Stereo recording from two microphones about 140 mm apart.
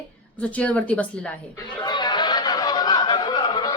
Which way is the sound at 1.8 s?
30° left (ahead or behind).